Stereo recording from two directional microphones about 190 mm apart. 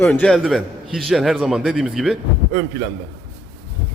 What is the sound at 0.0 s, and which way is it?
Speech, 5° left (ahead or behind).